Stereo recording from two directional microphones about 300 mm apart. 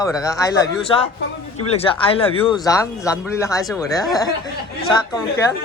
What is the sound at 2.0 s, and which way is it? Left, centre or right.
Speech, centre.